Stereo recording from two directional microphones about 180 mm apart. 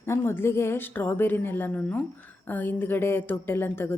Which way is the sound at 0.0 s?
15° left (ahead or behind).